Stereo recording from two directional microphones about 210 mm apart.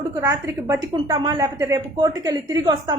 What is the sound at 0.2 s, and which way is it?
A woman's voice, 15° right (ahead or behind).